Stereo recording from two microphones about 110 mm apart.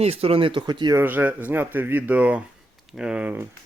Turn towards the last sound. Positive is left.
turn(degrees=-15)  # may be behind; listen again after turning